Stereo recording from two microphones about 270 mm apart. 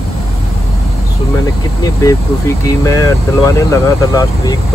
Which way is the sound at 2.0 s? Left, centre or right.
Centre.